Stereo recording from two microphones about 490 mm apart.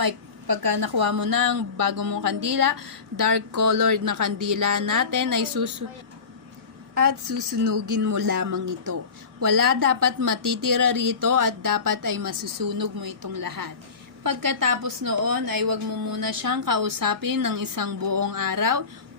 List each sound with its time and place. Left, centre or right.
0.0 s a woman's voice: right
6.9 s a woman's voice: right